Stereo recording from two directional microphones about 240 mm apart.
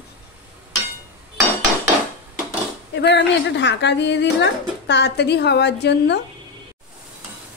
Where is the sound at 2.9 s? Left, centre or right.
Left.